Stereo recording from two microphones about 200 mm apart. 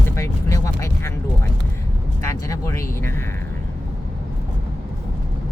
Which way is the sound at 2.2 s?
15° left (ahead or behind).